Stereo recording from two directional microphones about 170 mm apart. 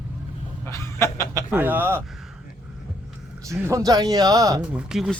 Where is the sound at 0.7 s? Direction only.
15° left (ahead or behind).